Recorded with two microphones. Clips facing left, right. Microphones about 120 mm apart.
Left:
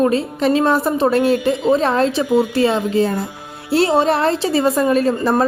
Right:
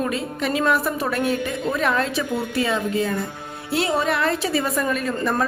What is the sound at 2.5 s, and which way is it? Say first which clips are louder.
A woman's voice: left 6 dB; 30° left (ahead or behind).